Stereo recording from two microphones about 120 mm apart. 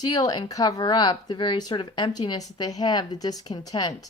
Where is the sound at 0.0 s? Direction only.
35° left (ahead or behind).